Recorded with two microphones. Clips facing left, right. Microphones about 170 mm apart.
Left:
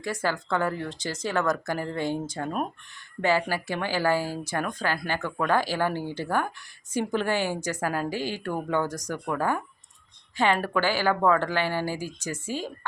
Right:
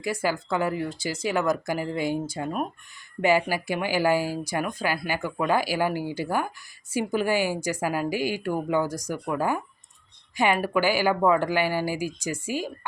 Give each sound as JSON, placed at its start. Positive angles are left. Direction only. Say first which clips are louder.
{"t": 0.0, "sound": "speech", "louder": "right 2 dB", "side_deg": -10}